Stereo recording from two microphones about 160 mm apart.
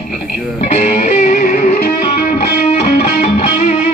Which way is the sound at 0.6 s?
40° left (ahead or behind).